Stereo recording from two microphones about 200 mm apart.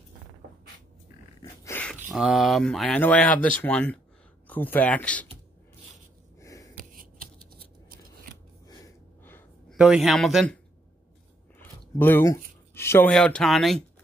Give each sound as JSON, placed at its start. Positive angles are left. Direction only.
{"t": 1.4, "sound": "dog", "side_deg": 15}
{"t": 2.1, "sound": "speech", "side_deg": 0}
{"t": 6.4, "sound": "gasp", "side_deg": 15}
{"t": 6.8, "sound": "scissors", "side_deg": -45}
{"t": 8.6, "sound": "a sound", "side_deg": 15}
{"t": 9.8, "sound": "speech", "side_deg": -5}